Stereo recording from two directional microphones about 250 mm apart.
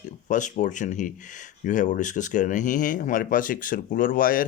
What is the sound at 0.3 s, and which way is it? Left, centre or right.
Speech, left.